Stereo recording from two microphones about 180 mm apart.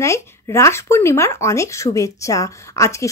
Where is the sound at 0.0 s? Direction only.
15° left (ahead or behind).